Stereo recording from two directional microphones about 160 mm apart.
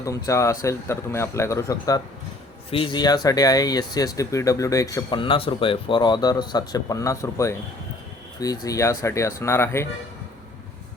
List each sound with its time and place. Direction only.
0.3 s speech: 20° left (ahead or behind)
2.6 s a man's voice: 35° left (ahead or behind); by 7.5 s 20° left (ahead or behind)
8.6 s speech: 20° left (ahead or behind)